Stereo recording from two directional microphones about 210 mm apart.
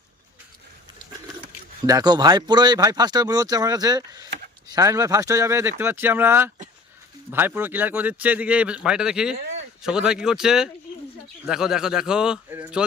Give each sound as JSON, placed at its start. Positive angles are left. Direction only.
{"t": 1.9, "sound": "a man's voice", "side_deg": -20}